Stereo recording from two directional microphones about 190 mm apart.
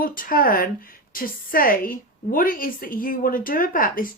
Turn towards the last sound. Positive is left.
turn(degrees=45)  # may be behind; listen again after turning